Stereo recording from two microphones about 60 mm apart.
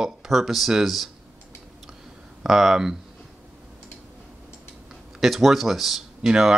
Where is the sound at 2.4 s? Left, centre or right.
Centre.